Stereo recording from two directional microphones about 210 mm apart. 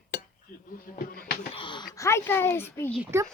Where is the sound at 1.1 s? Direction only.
45° left (ahead or behind).